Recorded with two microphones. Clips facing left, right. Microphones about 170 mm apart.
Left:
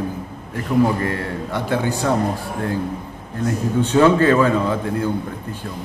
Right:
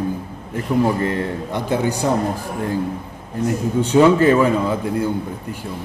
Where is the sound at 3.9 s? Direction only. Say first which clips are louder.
Right 2 dB; 15° right (ahead or behind).